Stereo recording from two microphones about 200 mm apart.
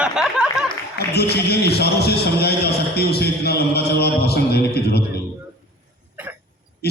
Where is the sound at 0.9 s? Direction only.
55° left (ahead or behind).